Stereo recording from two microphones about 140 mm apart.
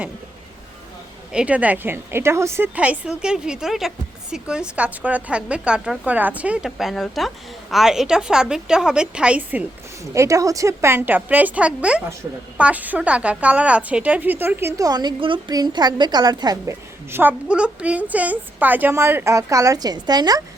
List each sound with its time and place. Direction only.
1.3 s a woman's voice: 10° right (ahead or behind)
10.2 s a woman's voice: 25° right (ahead or behind)
17.1 s a woman's voice: 15° right (ahead or behind)